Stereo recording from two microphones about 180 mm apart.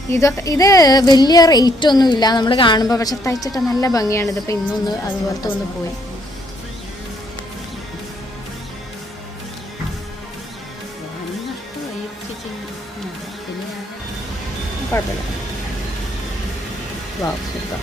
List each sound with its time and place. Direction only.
0.1 s speech: 15° left (ahead or behind)
14.9 s speech: 15° left (ahead or behind)